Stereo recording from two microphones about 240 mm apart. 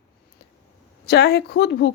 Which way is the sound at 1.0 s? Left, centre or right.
Left.